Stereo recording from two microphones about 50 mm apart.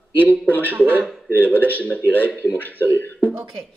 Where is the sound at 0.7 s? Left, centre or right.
Right.